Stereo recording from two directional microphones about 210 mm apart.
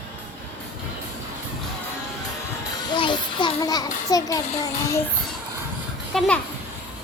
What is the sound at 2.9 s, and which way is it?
Music, 20° left (ahead or behind).